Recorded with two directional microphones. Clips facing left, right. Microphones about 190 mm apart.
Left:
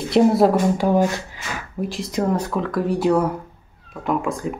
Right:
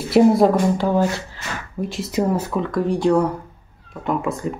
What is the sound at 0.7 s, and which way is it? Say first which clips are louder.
Speech: left 1 dB; 15° left (ahead or behind).